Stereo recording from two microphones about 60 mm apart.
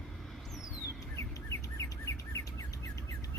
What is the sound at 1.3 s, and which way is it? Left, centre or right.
Bird, left.